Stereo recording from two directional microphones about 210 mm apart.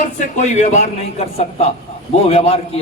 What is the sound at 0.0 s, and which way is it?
A man's voice, 35° left (ahead or behind).